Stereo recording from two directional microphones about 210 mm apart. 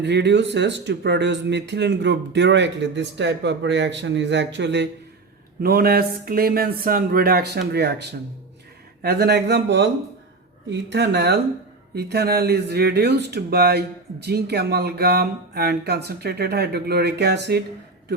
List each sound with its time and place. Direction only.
0.0 s speech: 55° right (ahead or behind)
5.6 s speech: 45° right (ahead or behind)
9.0 s speech: 50° right (ahead or behind)